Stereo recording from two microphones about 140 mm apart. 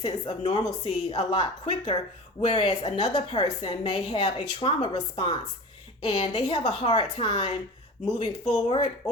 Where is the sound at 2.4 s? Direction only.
45° left (ahead or behind).